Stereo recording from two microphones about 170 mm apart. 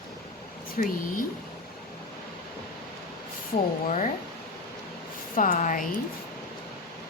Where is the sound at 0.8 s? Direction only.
55° left (ahead or behind).